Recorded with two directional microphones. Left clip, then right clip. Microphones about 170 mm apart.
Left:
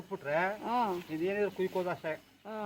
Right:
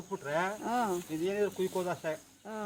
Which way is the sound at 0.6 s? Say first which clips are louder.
Even; 85° right.